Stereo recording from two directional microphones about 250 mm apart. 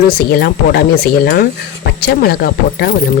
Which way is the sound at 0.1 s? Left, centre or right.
Left.